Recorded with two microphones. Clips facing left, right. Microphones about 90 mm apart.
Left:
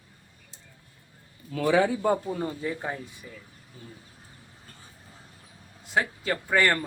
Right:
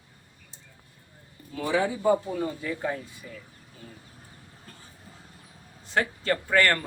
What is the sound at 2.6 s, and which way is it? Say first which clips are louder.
Speech: right 1 dB; 20° left (ahead or behind).